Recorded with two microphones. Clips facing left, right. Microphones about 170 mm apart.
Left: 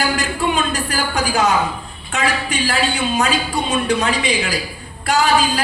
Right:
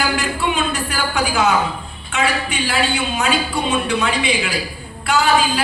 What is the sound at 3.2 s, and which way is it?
A woman's voice, 40° left (ahead or behind).